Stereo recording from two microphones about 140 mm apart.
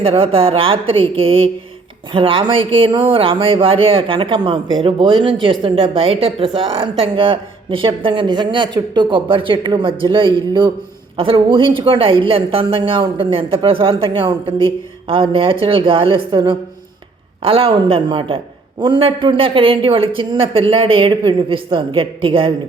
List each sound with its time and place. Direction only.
0.0 s speech: 40° right (ahead or behind)